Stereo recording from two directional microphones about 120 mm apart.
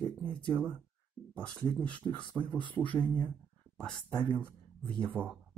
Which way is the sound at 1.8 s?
10° left (ahead or behind).